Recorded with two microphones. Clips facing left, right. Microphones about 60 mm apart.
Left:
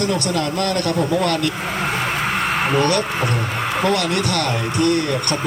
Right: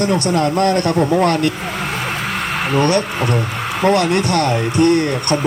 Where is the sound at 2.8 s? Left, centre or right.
Right.